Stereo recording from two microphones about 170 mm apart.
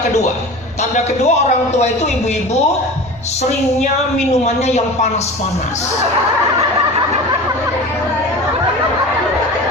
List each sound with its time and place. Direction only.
0.9 s speech: 40° left (ahead or behind)
4.3 s speech: 40° left (ahead or behind)